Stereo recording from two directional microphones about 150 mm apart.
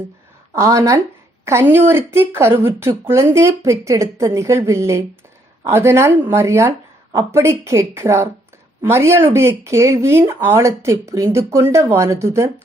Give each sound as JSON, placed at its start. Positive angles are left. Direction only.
{"t": 0.5, "sound": "a woman's voice", "side_deg": -20}